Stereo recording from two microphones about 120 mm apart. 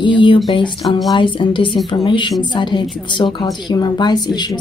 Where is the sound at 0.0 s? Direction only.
45° left (ahead or behind).